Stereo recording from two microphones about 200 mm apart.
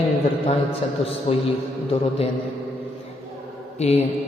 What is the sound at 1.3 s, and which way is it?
Speech, 30° left (ahead or behind).